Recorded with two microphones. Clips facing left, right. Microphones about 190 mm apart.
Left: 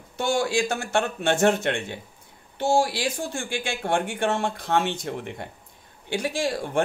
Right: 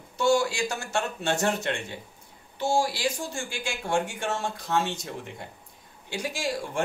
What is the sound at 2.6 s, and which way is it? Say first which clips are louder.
Speech: left 3 dB; 55° left (ahead or behind).